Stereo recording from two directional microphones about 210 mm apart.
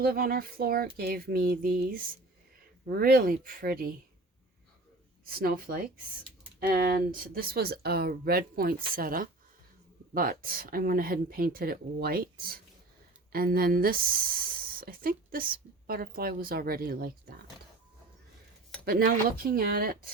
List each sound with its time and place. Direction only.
0.0 s speech: 45° right (ahead or behind)
5.2 s speech: 45° right (ahead or behind)
18.9 s speech: 45° right (ahead or behind)